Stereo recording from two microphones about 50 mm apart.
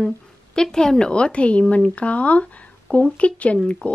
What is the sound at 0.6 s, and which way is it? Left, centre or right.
Speech, centre.